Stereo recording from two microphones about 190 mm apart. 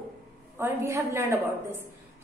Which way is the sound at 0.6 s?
10° right (ahead or behind).